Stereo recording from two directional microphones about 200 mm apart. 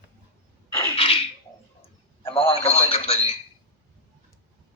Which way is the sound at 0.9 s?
30° left (ahead or behind).